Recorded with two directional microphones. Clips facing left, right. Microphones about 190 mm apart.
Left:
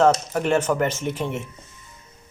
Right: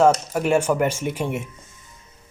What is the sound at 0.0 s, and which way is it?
Speech, 10° right (ahead or behind).